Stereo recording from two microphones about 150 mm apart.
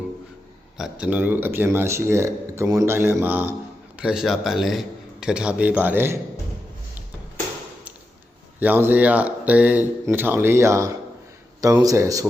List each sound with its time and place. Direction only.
0.8 s speech: 5° right (ahead or behind)
8.5 s speech: 10° right (ahead or behind)